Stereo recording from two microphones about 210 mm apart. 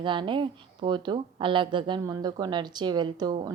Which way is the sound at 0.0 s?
25° right (ahead or behind).